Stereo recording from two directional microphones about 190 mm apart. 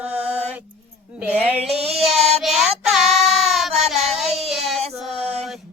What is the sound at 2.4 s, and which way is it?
Child singing, centre (ahead or behind).